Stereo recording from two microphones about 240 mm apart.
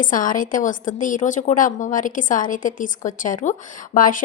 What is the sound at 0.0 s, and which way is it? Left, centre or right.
A woman's voice, left.